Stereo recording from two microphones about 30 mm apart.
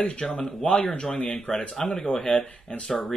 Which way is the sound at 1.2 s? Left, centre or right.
Left.